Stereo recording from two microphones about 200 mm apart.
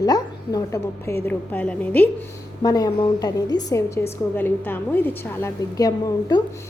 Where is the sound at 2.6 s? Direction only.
20° left (ahead or behind).